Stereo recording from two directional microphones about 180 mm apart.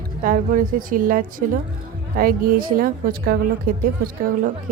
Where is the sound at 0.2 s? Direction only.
50° right (ahead or behind).